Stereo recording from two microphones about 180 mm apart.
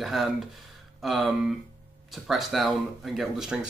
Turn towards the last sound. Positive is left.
turn(degrees=-5)  # may be behind; listen again after turning